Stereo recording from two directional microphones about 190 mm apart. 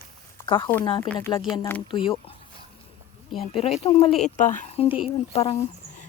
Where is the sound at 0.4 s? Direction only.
25° left (ahead or behind).